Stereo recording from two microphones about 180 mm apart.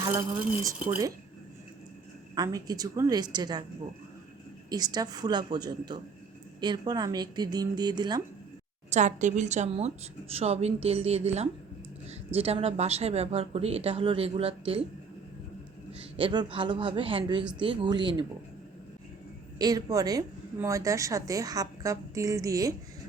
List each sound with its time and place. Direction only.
0.0 s speech: 15° right (ahead or behind)
2.3 s a woman's voice: 20° right (ahead or behind)
4.7 s a woman's voice: 20° right (ahead or behind)
8.9 s speech: 40° right (ahead or behind)
15.9 s a woman's voice: 30° right (ahead or behind)
19.5 s a woman's voice: 20° right (ahead or behind)